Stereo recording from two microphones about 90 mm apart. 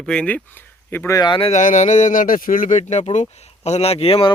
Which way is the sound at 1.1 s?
45° left (ahead or behind).